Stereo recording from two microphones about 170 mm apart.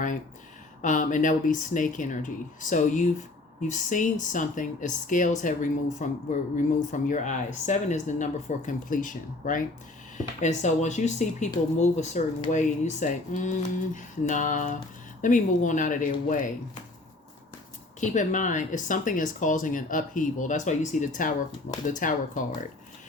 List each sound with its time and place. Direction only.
0.8 s speech: 50° left (ahead or behind)
18.0 s speech: 45° left (ahead or behind)